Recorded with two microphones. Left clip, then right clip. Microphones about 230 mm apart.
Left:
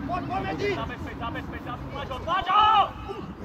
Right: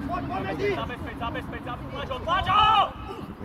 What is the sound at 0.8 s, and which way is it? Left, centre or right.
Vehicle, right.